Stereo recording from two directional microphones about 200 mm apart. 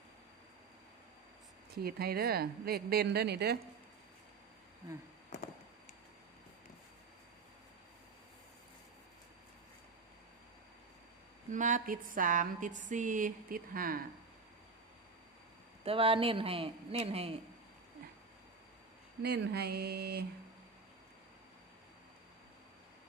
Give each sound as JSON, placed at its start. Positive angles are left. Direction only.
{"t": 1.7, "sound": "a woman's voice", "side_deg": -50}
{"t": 11.5, "sound": "speech", "side_deg": -40}
{"t": 15.8, "sound": "speech", "side_deg": -30}
{"t": 19.2, "sound": "a woman's voice", "side_deg": -55}